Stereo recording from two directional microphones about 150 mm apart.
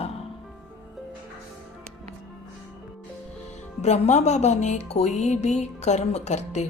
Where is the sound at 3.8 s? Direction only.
50° left (ahead or behind).